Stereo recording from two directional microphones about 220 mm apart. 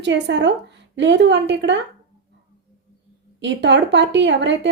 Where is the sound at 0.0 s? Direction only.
55° right (ahead or behind).